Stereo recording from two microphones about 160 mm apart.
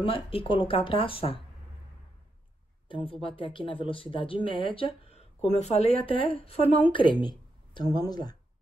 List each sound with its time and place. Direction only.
0.0 s speech: 35° left (ahead or behind)
2.9 s speech: 35° left (ahead or behind)